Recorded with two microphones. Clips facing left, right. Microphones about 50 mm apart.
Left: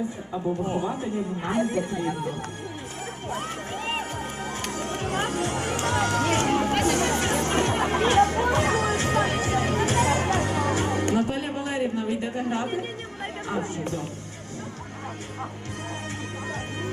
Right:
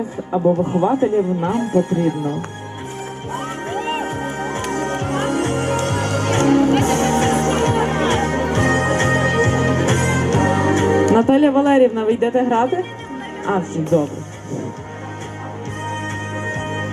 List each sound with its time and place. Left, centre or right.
0.8 s speech: right
3.3 s music: right
13.4 s speech: right
16.5 s music: right